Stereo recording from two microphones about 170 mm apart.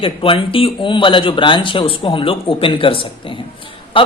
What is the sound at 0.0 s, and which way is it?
A man's voice, 30° left (ahead or behind).